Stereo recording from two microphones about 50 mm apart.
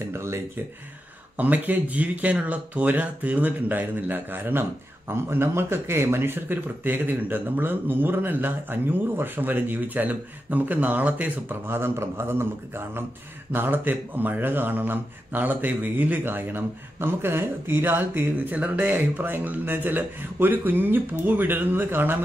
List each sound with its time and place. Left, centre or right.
0.0 s a sound: right
1.3 s speech: right
5.0 s speech: right
12.0 s speech: right